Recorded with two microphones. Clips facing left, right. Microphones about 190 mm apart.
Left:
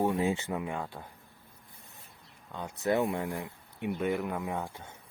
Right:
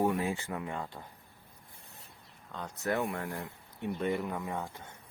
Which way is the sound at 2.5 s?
10° left (ahead or behind).